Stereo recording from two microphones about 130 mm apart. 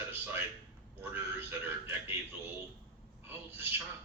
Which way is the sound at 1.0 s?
15° right (ahead or behind).